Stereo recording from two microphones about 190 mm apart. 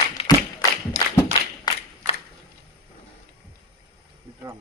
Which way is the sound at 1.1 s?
20° left (ahead or behind).